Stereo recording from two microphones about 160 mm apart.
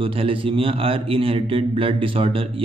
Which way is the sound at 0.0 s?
35° right (ahead or behind).